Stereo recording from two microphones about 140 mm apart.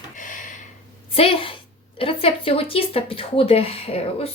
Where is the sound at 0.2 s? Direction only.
70° left (ahead or behind).